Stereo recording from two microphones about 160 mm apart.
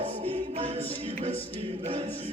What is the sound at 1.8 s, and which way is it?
Choir, 40° right (ahead or behind).